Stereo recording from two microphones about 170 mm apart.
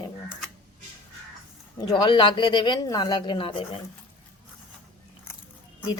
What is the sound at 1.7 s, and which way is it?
Speech, 25° left (ahead or behind).